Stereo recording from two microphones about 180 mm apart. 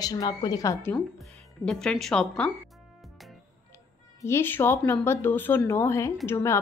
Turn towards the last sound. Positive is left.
turn(degrees=15)  # may be behind; listen again after turning